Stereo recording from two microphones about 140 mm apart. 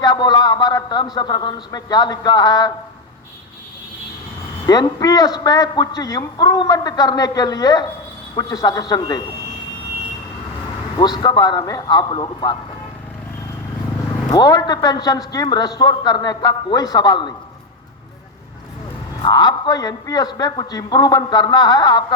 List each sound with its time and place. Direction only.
0.0 s a man's voice: 30° left (ahead or behind)
4.6 s a man's voice: 30° left (ahead or behind)
10.9 s speech: 30° left (ahead or behind)
14.3 s a man's voice: 30° left (ahead or behind)
19.2 s a man's voice: 30° left (ahead or behind)